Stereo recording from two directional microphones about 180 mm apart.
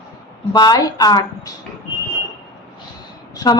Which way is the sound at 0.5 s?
20° left (ahead or behind).